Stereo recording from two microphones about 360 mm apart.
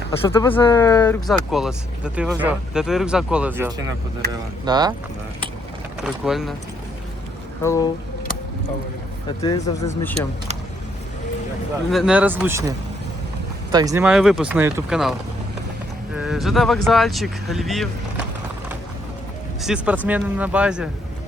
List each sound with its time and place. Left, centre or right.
0.3 s speech: centre
6.0 s speech: centre
7.6 s speech: centre
9.4 s speech: centre
11.9 s speech: centre
16.1 s speech: centre
19.6 s speech: centre